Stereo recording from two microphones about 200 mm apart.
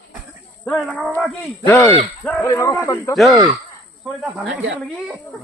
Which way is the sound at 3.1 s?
Centre (ahead or behind).